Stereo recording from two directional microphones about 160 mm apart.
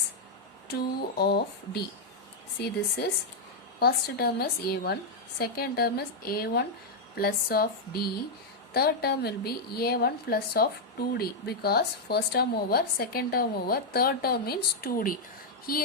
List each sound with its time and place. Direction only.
0.7 s speech: 75° left (ahead or behind)
3.8 s speech: 75° left (ahead or behind)
15.7 s a sound: 65° left (ahead or behind)